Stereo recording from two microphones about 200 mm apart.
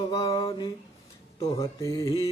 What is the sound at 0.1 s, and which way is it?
Speech, 25° left (ahead or behind).